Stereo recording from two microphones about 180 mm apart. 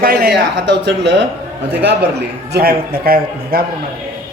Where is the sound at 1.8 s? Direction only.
70° right (ahead or behind); by 3.7 s 55° right (ahead or behind).